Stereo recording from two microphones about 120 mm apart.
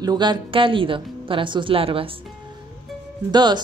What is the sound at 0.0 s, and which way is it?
A woman's voice, 35° right (ahead or behind).